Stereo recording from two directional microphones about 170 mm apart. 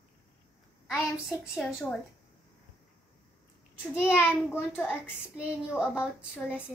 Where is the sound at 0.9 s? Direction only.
Centre (ahead or behind).